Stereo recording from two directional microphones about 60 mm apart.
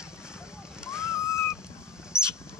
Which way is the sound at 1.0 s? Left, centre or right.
Left.